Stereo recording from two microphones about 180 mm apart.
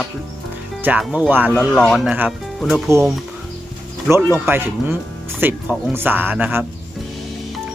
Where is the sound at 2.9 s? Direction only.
15° right (ahead or behind).